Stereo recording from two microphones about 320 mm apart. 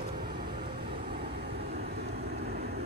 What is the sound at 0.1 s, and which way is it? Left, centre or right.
Vehicle, right.